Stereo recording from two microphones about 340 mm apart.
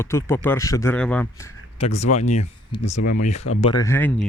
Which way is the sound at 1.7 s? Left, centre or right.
Centre.